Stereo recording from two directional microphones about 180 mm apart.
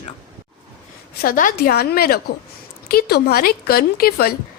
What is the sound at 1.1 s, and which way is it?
A woman's voice, 55° left (ahead or behind).